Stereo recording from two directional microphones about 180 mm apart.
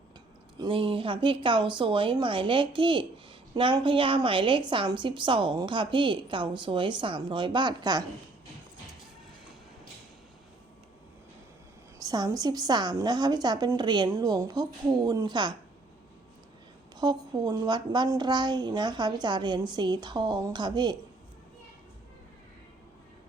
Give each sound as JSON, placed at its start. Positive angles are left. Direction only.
{"t": 0.6, "sound": "a woman's voice", "side_deg": -30}
{"t": 11.9, "sound": "a woman's voice", "side_deg": -20}
{"t": 17.0, "sound": "a woman's voice", "side_deg": -25}